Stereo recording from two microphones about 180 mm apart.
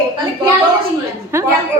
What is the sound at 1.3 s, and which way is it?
Speech, 15° right (ahead or behind).